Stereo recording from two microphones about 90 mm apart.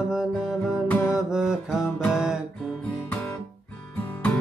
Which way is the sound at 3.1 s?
15° left (ahead or behind).